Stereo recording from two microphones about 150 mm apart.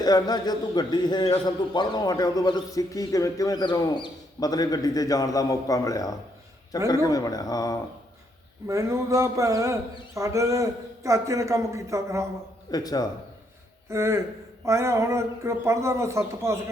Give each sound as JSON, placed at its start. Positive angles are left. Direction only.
{"t": 0.0, "sound": "a man's voice", "side_deg": 25}
{"t": 8.6, "sound": "speech", "side_deg": -20}
{"t": 12.7, "sound": "a man's voice", "side_deg": 25}
{"t": 13.9, "sound": "speech", "side_deg": -20}